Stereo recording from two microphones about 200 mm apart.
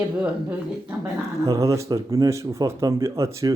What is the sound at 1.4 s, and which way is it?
Speech, 15° right (ahead or behind).